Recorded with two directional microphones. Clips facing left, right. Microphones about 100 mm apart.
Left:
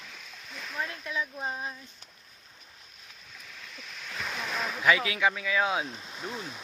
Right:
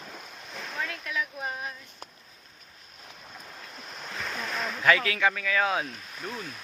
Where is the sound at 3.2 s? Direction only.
45° right (ahead or behind).